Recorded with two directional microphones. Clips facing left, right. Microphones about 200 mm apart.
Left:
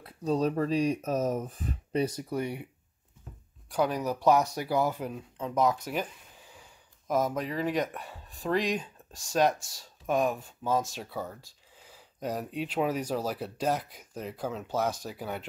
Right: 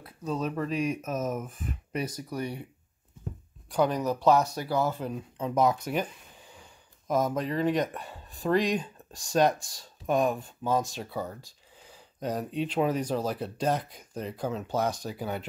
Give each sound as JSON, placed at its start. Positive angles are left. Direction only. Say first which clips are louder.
{"t": 0.0, "sound": "speech", "louder": "left 4 dB", "side_deg": 35}
{"t": 3.7, "sound": "speech", "louder": "right 2 dB", "side_deg": 5}